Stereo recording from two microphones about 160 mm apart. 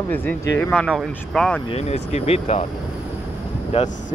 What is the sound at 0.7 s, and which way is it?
Speech, centre (ahead or behind).